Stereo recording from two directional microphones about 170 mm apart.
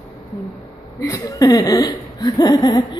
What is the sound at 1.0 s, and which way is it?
Speech, 20° left (ahead or behind).